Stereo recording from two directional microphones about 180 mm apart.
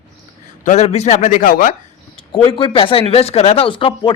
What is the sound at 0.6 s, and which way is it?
Speech, 40° left (ahead or behind).